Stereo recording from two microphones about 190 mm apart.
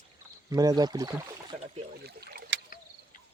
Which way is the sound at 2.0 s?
60° right (ahead or behind).